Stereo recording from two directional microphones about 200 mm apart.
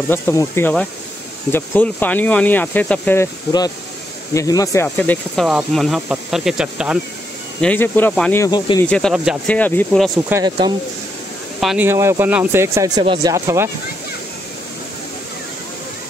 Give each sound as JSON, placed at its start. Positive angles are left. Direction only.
{"t": 0.1, "sound": "speech", "side_deg": 15}
{"t": 7.6, "sound": "speech", "side_deg": 10}
{"t": 8.5, "sound": "speech", "side_deg": 20}
{"t": 8.8, "sound": "speech", "side_deg": 5}
{"t": 9.5, "sound": "speech", "side_deg": 10}
{"t": 10.3, "sound": "speech", "side_deg": -20}
{"t": 11.6, "sound": "speech", "side_deg": -5}